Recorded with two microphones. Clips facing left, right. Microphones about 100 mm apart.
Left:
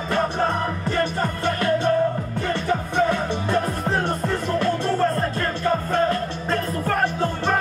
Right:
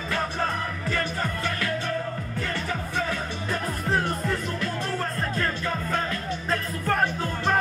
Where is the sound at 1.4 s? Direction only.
25° left (ahead or behind).